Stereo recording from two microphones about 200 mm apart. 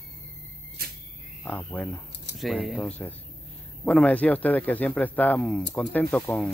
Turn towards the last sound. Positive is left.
turn(degrees=5)  # may be behind; listen again after turning